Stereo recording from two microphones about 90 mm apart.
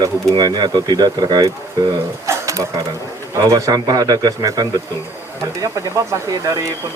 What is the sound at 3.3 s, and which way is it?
Speech, 40° right (ahead or behind).